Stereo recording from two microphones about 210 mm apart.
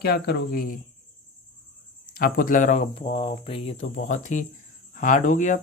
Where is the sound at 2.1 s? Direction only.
45° left (ahead or behind).